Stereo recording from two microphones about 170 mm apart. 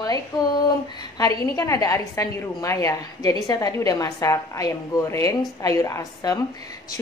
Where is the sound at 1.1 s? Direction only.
20° left (ahead or behind).